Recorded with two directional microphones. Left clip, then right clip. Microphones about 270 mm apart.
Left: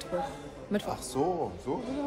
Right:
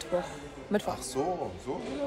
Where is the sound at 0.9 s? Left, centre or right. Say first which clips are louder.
Left 1 dB; centre.